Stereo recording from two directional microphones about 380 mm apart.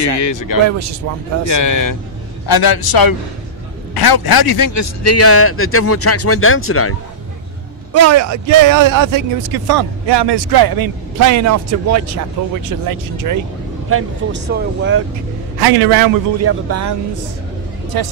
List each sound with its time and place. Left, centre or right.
0.0 s speech: left
0.7 s speech: right
1.5 s speech: left
2.4 s a man's voice: left
7.9 s speech: right
13.8 s speech: right
15.6 s a man's voice: right
16.3 s speech: right